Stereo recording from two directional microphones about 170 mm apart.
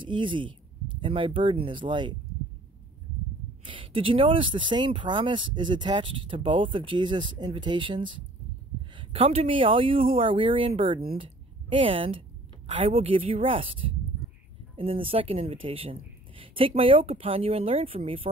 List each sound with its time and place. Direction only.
0.0 s speech: 30° right (ahead or behind)
3.6 s speech: 30° right (ahead or behind)